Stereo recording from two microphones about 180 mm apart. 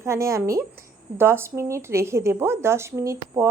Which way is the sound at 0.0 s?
15° right (ahead or behind).